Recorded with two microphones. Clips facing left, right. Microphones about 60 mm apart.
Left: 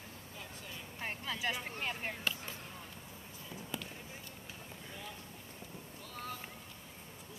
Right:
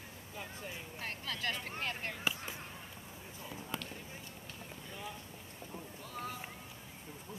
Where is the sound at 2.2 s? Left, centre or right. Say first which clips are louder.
Right 4 dB; centre.